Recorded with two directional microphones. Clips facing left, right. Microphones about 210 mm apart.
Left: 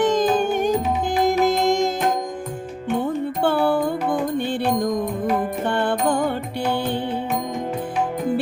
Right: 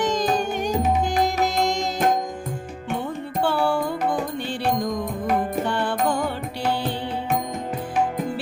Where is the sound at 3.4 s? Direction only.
55° left (ahead or behind).